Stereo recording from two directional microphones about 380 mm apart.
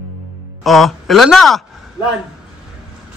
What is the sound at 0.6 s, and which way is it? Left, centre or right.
Speech, centre.